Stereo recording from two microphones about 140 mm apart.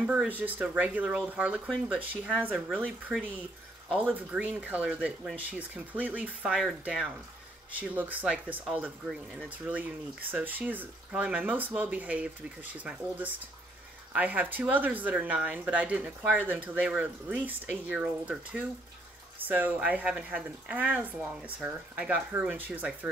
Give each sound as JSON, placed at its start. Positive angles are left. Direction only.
{"t": 0.0, "sound": "speech", "side_deg": -5}
{"t": 3.9, "sound": "speech", "side_deg": -10}